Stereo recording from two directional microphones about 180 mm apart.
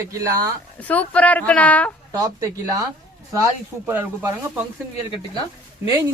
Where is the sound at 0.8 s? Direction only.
10° left (ahead or behind).